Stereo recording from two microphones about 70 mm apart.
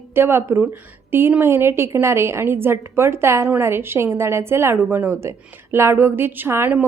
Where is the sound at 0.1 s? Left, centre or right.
Right.